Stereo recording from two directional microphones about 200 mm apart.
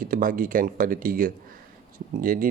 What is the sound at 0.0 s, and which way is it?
Speech, 45° right (ahead or behind).